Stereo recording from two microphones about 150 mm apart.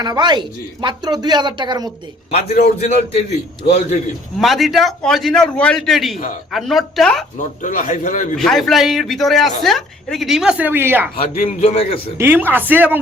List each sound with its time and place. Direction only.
0.0 s speech: 30° right (ahead or behind)
2.3 s a man's voice: 45° left (ahead or behind)
4.4 s a man's voice: centre (ahead or behind)
6.1 s a man's voice: 65° left (ahead or behind)
6.5 s a man's voice: centre (ahead or behind)
7.3 s a man's voice: 60° left (ahead or behind)
8.4 s a man's voice: centre (ahead or behind); by 11.1 s 15° right (ahead or behind)
11.4 s a man's voice: 40° left (ahead or behind)
12.1 s speech: 15° right (ahead or behind)